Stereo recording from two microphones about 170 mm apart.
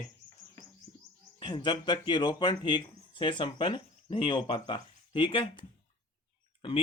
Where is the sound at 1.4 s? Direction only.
25° left (ahead or behind).